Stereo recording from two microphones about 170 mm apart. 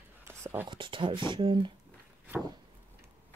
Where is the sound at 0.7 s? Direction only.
30° right (ahead or behind).